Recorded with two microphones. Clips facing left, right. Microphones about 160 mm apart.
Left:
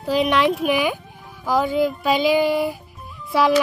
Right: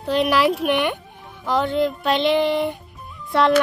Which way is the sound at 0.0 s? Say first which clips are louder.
Even; centre (ahead or behind).